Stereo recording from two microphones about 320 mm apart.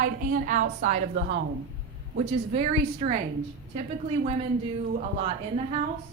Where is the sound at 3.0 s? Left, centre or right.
Right.